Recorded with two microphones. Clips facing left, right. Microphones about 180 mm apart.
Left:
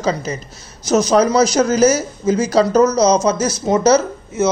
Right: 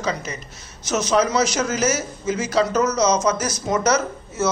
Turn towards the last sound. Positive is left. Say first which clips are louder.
# left 5 dB
turn(degrees=20)  # may be behind; listen again after turning